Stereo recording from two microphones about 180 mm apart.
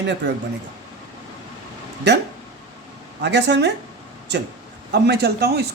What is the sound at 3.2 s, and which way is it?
Speech, 70° right (ahead or behind).